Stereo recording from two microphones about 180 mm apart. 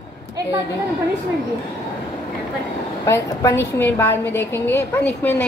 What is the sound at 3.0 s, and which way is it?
A woman's voice, 15° left (ahead or behind).